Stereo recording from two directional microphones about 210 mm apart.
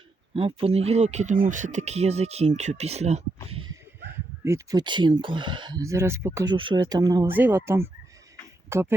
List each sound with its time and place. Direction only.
0.3 s speech: 30° right (ahead or behind)
4.1 s speech: 15° right (ahead or behind)